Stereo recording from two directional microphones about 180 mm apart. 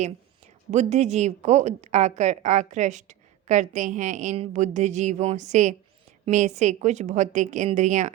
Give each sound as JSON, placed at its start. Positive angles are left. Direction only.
{"t": 0.7, "sound": "a woman's voice", "side_deg": -40}